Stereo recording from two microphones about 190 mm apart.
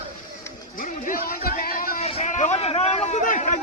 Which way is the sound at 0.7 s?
45° left (ahead or behind).